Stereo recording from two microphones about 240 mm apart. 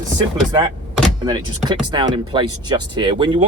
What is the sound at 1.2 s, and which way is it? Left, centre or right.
Speech, centre.